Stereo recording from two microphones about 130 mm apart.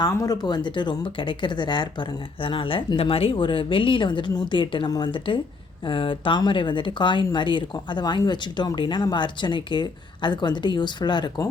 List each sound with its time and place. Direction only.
0.0 s speech: 30° left (ahead or behind)